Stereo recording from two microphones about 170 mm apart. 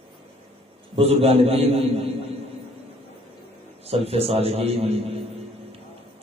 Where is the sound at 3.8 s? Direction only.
35° right (ahead or behind).